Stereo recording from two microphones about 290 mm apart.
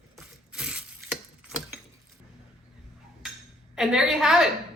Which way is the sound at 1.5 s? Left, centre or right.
Centre.